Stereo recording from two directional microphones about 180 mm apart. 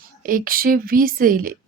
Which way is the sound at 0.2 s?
50° right (ahead or behind).